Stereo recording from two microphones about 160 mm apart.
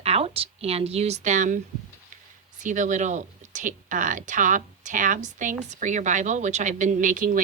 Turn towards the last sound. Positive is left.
turn(degrees=-55)  # may be behind; listen again after turning